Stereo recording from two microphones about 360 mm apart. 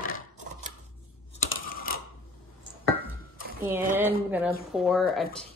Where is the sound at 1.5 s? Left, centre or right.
Left.